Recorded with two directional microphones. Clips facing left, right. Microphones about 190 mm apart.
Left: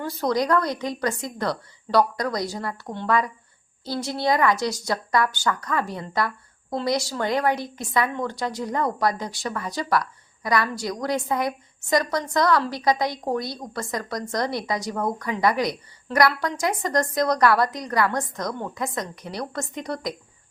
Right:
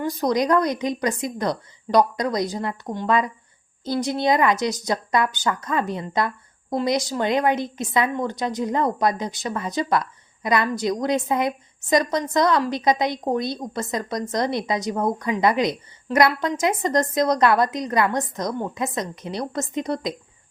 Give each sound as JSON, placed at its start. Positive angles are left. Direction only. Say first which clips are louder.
{"t": 0.0, "sound": "a woman's voice", "louder": "right 2 dB", "side_deg": -15}